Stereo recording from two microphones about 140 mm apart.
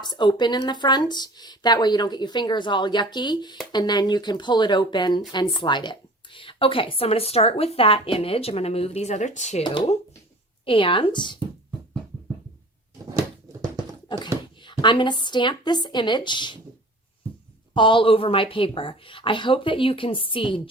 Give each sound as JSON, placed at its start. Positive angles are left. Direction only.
{"t": 0.0, "sound": "speech", "side_deg": 30}
{"t": 9.6, "sound": "speech", "side_deg": 45}
{"t": 13.1, "sound": "a sound", "side_deg": -25}
{"t": 14.6, "sound": "speech", "side_deg": 35}
{"t": 17.7, "sound": "speech", "side_deg": 35}